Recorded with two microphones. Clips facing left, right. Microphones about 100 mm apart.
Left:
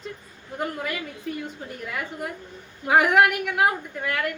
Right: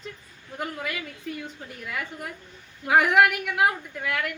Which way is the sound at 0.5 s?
5° left (ahead or behind).